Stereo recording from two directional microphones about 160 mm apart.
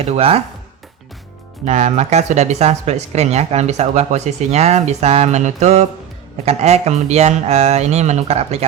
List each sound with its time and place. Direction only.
0.0 s speech: 40° right (ahead or behind)
1.6 s speech: 45° right (ahead or behind)